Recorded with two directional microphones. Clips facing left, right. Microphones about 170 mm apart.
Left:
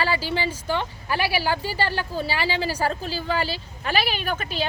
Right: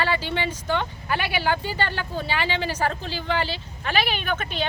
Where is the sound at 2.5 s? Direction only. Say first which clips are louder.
Left 1 dB; 35° left (ahead or behind).